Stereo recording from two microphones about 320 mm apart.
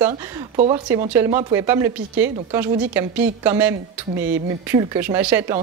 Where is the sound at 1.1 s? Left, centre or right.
Centre.